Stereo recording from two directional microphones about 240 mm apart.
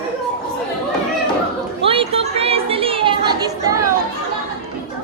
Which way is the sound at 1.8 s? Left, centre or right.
Right.